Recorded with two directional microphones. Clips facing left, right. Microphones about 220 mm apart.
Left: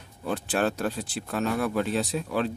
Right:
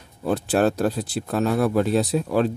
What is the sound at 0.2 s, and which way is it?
Speech, 40° right (ahead or behind).